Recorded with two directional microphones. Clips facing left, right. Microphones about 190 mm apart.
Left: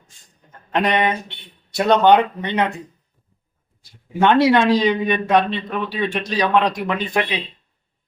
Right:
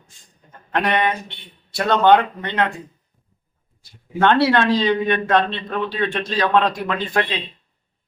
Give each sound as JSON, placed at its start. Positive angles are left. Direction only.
{"t": 0.7, "sound": "a man's voice", "side_deg": 20}
{"t": 4.2, "sound": "a man's voice", "side_deg": 15}